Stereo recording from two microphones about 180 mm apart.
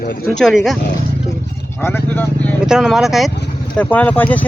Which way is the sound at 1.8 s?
10° left (ahead or behind).